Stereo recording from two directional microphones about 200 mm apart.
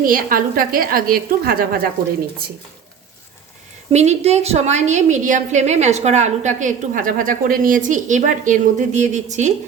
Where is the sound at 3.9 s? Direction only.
35° right (ahead or behind).